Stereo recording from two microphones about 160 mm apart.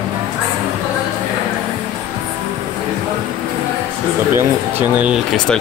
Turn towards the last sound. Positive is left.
turn(degrees=-10)  # may be behind; listen again after turning